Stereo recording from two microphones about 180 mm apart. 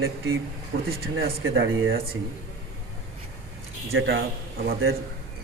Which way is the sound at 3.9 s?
90° right.